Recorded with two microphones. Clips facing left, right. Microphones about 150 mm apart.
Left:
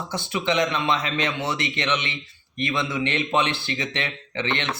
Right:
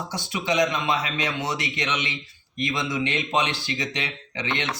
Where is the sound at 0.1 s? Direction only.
15° right (ahead or behind).